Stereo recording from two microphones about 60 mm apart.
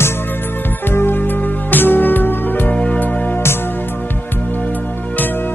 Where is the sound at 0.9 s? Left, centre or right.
Left.